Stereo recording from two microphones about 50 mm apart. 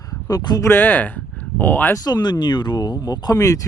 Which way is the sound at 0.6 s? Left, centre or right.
Left.